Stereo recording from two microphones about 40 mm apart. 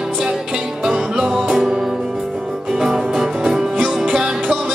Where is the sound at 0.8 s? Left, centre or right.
Centre.